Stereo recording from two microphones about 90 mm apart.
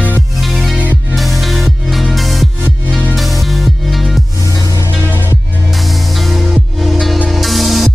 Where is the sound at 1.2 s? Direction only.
Centre (ahead or behind).